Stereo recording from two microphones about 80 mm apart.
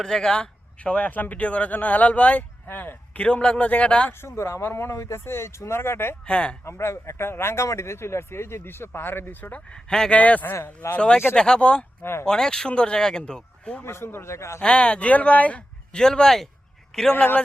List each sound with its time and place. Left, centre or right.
0.0 s speech: centre; by 3.2 s left
3.2 s speech: centre
4.2 s speech: left
6.2 s speech: centre
6.7 s speech: left
9.9 s speech: centre
10.2 s speech: centre
13.8 s speech: left
14.6 s a man's voice: centre
17.2 s speech: centre